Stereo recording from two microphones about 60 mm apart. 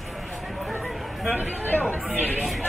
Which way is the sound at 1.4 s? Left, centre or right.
Right.